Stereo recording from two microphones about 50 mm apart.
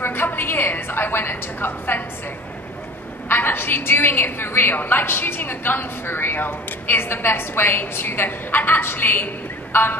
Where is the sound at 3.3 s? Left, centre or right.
Left.